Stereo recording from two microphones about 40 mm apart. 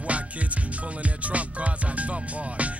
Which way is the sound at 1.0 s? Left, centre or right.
Right.